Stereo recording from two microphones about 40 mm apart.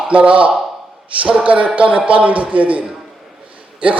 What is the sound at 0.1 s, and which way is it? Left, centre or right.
Speech, right.